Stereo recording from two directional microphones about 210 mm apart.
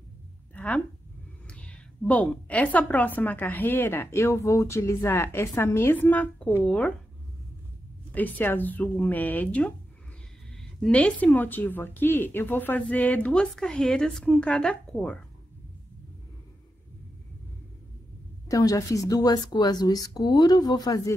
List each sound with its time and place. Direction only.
0.6 s speech: 5° left (ahead or behind)
8.1 s speech: 10° left (ahead or behind)
18.5 s speech: 15° left (ahead or behind)